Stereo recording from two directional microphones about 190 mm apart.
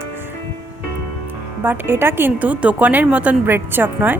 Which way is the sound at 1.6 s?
10° right (ahead or behind).